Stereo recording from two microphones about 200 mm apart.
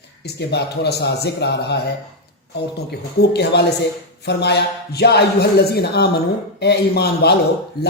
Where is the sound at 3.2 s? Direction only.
55° left (ahead or behind).